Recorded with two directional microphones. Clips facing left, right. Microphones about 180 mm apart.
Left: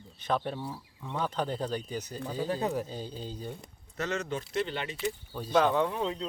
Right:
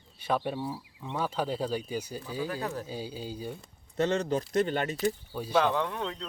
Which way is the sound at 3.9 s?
30° right (ahead or behind).